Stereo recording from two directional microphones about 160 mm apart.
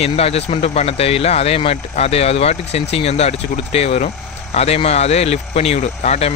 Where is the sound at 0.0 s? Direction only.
40° left (ahead or behind).